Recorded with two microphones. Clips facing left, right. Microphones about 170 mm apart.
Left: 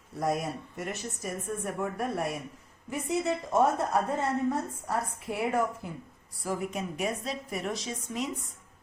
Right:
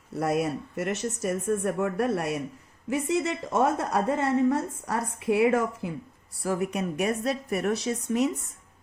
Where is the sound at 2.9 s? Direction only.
90° right.